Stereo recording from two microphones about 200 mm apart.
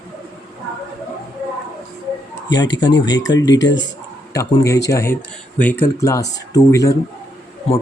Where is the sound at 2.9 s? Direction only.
20° left (ahead or behind).